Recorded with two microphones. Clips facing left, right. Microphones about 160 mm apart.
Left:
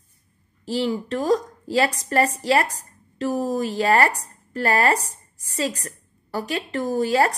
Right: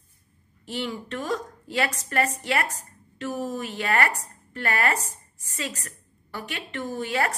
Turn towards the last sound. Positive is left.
turn(degrees=35)  # may be behind; listen again after turning